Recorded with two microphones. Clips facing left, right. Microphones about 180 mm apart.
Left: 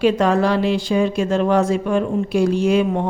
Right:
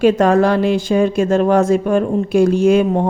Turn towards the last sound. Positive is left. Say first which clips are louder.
# right 4 dB
turn(degrees=-45)  # may be behind; listen again after turning